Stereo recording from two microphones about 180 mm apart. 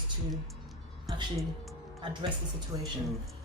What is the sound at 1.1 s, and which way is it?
Speech, 20° right (ahead or behind).